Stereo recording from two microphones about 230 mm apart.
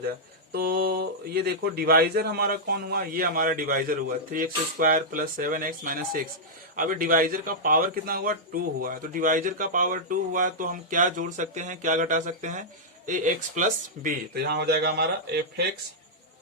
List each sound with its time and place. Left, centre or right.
0.5 s a man's voice: right